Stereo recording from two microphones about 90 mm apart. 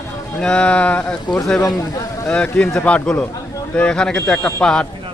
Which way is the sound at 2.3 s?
10° left (ahead or behind).